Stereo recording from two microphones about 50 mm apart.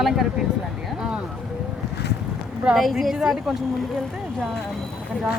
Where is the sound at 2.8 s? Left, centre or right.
Centre.